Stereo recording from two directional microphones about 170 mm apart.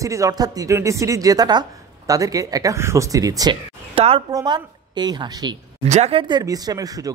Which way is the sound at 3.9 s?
35° right (ahead or behind).